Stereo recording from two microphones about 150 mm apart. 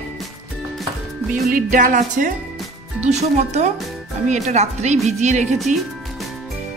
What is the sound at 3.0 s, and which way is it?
Speech, 50° right (ahead or behind).